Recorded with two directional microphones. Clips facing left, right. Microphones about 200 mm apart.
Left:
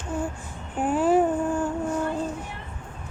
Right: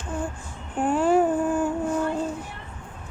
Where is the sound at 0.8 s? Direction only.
5° left (ahead or behind).